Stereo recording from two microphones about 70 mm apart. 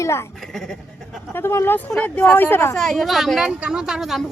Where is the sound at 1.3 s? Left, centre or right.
Left.